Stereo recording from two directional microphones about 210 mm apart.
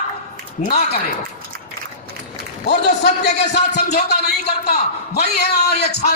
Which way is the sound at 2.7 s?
55° left (ahead or behind).